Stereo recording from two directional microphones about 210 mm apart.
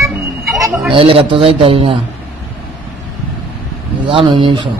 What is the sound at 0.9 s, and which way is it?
A man's voice, 25° right (ahead or behind).